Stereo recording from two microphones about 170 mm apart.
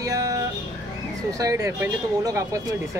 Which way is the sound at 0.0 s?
20° right (ahead or behind).